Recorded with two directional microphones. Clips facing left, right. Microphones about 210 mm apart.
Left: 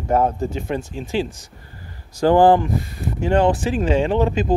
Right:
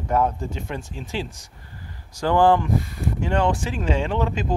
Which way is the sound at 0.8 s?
Centre (ahead or behind).